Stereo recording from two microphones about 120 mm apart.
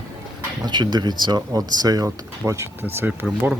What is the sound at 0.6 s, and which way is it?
Speech, 40° right (ahead or behind).